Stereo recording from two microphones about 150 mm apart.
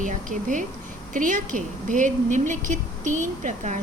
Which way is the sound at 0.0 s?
60° right (ahead or behind).